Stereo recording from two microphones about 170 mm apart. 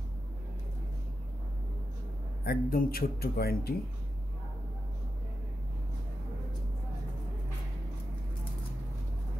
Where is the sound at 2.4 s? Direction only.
60° left (ahead or behind).